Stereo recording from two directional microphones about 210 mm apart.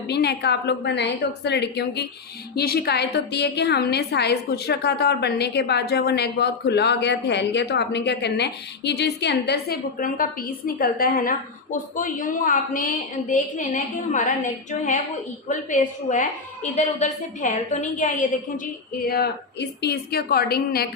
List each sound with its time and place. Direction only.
0.1 s a woman's voice: 50° left (ahead or behind); by 14.3 s 35° left (ahead or behind)
15.4 s a woman's voice: 35° left (ahead or behind)
19.0 s a woman's voice: 50° left (ahead or behind)